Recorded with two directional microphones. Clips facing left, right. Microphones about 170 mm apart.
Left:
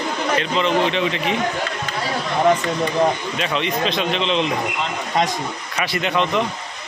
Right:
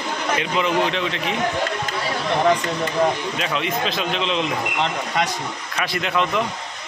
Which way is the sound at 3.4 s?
5° right (ahead or behind).